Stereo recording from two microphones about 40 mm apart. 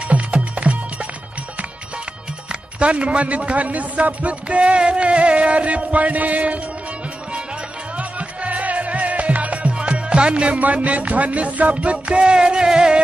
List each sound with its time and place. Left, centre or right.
0.1 s music: right
2.8 s a man's voice: right
8.0 s music: right
10.6 s a man's voice: right; by 13.0 s centre